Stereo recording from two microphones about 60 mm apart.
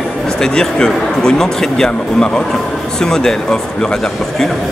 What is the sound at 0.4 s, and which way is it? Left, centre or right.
A man's voice, centre.